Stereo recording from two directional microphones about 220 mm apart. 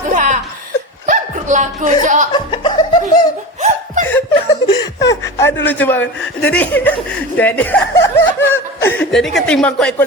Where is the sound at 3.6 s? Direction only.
35° right (ahead or behind).